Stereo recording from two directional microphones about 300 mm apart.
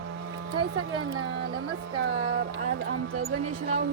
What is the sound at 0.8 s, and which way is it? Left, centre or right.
Speech, right.